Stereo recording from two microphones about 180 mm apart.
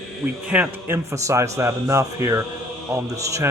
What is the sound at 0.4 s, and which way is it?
Speech, 5° right (ahead or behind).